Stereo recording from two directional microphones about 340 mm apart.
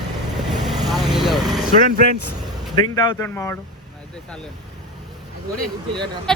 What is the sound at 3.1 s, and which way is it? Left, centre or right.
Speech, centre.